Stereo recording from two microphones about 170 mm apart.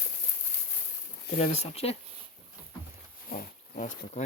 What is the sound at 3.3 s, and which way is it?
Speech, 50° left (ahead or behind).